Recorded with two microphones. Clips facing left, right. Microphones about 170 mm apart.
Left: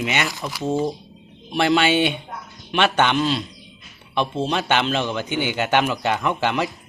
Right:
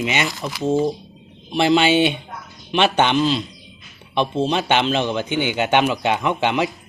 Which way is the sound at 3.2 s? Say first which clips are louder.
Right 3 dB; 5° left (ahead or behind).